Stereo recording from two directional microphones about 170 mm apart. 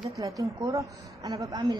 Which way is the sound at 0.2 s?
20° right (ahead or behind).